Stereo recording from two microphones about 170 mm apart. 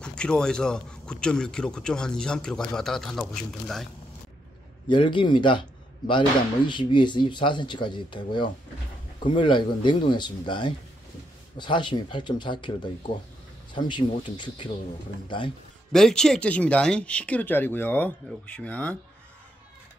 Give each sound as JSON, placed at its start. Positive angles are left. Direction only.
{"t": 0.0, "sound": "speech", "side_deg": 5}
{"t": 4.8, "sound": "speech", "side_deg": 30}
{"t": 15.9, "sound": "speech", "side_deg": 5}